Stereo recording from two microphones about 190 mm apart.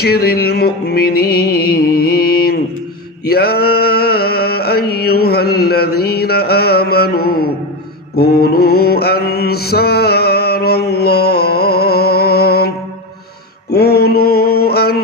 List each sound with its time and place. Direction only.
0.0 s music: 55° left (ahead or behind)
8.1 s mantra: 55° left (ahead or behind)
13.7 s mantra: 55° left (ahead or behind)